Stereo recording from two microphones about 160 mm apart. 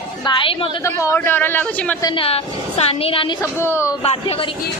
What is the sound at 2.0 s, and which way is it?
A woman's voice, 30° left (ahead or behind).